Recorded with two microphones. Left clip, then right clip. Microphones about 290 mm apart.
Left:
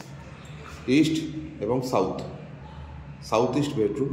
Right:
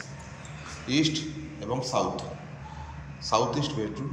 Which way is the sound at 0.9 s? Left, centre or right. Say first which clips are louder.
Left 4 dB; centre.